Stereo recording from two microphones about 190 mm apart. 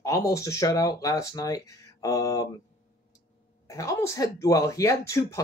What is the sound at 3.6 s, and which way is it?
Speech, 15° left (ahead or behind).